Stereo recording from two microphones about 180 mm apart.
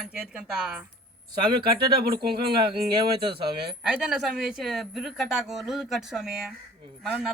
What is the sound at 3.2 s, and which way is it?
Speech, 30° right (ahead or behind).